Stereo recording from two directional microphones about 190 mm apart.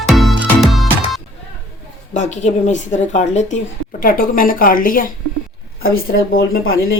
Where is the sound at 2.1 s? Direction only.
40° left (ahead or behind).